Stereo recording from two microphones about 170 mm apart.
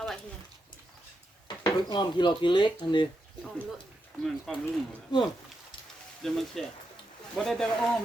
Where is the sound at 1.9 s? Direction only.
25° left (ahead or behind).